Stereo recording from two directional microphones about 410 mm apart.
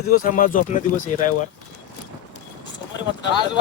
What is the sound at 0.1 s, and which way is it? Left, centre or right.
Speech, centre.